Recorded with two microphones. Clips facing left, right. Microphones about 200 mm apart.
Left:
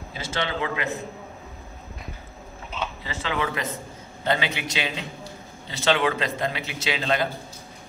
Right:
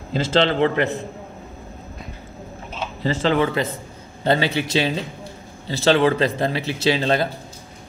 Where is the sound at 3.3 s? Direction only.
30° right (ahead or behind).